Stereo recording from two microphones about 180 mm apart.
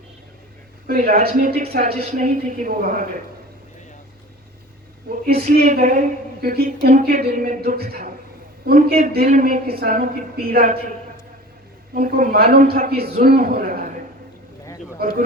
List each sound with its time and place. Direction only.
0.9 s a man's voice: 60° right (ahead or behind)
1.8 s a woman's voice: 40° right (ahead or behind)
5.2 s a man's voice: 55° right (ahead or behind)
9.2 s a woman's voice: 45° right (ahead or behind)
11.9 s a man's voice: 55° right (ahead or behind)